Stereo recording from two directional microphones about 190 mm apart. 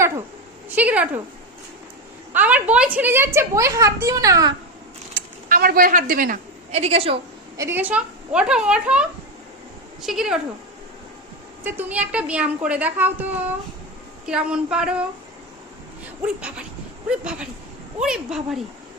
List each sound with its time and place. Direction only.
0.8 s a woman's voice: 10° right (ahead or behind)
2.3 s a woman's voice: 10° right (ahead or behind)
5.5 s a woman's voice: 50° right (ahead or behind); by 7.2 s 30° right (ahead or behind)
7.5 s a woman's voice: 15° right (ahead or behind)
11.6 s a woman's voice: 10° right (ahead or behind)
16.2 s a woman's voice: 5° right (ahead or behind)